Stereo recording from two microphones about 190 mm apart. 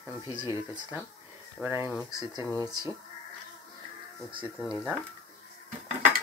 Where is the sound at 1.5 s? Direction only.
10° right (ahead or behind).